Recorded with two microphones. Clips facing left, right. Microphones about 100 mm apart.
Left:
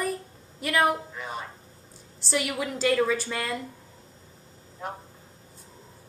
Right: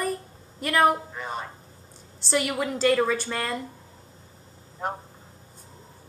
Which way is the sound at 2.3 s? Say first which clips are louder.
Right 3 dB; centre (ahead or behind).